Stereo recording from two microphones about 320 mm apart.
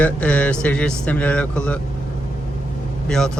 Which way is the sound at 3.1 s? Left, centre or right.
Centre.